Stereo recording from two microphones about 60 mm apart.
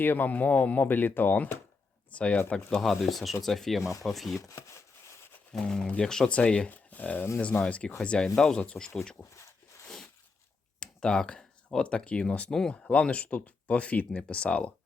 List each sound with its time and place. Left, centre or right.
0.0 s speech: left
2.5 s speech: centre
4.4 s speech: left
5.5 s speech: centre
10.8 s speech: centre